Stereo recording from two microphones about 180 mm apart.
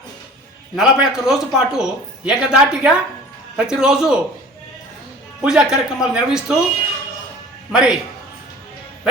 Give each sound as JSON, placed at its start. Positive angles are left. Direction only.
{"t": 0.8, "sound": "a man's voice", "side_deg": -5}
{"t": 5.4, "sound": "a man's voice", "side_deg": -5}
{"t": 7.7, "sound": "a man's voice", "side_deg": -5}